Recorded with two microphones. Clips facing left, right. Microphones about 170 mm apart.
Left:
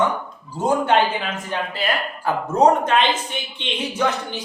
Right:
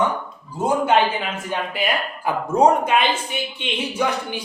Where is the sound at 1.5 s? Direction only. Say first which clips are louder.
Right 1 dB; 15° right (ahead or behind).